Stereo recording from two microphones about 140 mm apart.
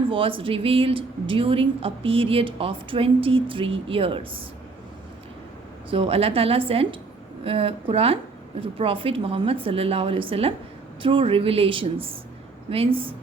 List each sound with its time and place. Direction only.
0.1 s a woman's voice: 40° right (ahead or behind)
5.9 s a woman's voice: 40° right (ahead or behind)